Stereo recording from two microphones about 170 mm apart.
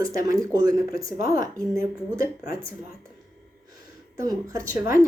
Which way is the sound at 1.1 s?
55° left (ahead or behind).